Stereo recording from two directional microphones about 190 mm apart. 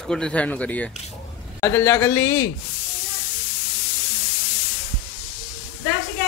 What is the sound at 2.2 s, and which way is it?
Speech, 80° left.